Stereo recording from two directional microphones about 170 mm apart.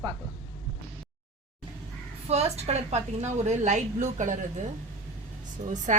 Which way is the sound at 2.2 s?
40° right (ahead or behind).